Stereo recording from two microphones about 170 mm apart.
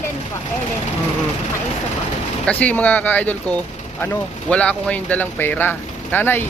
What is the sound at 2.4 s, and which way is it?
Speech, 10° left (ahead or behind).